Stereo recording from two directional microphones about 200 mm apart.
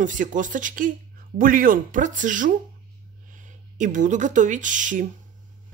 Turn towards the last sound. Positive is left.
turn(degrees=-40)  # may be behind; listen again after turning